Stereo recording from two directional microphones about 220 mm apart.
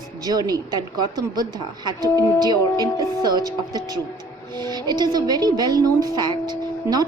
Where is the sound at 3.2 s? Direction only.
20° right (ahead or behind).